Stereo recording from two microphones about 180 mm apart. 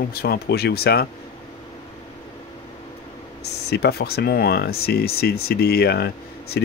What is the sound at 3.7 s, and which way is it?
Speech, 65° left (ahead or behind).